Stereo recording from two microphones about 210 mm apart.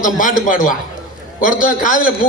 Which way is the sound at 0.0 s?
40° left (ahead or behind).